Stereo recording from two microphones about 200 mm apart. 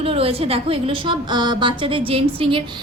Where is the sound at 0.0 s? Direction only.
30° right (ahead or behind).